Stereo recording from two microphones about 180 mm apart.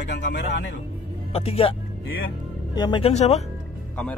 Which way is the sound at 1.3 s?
35° left (ahead or behind).